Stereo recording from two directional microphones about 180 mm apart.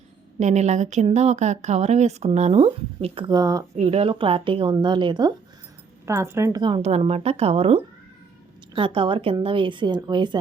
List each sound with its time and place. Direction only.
0.3 s speech: 40° right (ahead or behind); by 3.6 s 20° right (ahead or behind)
3.8 s a woman's voice: 35° right (ahead or behind)